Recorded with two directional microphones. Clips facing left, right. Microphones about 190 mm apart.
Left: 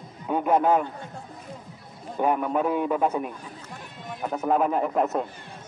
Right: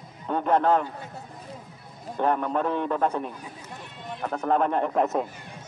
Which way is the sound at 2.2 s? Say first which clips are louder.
Left 1 dB; 10° left (ahead or behind).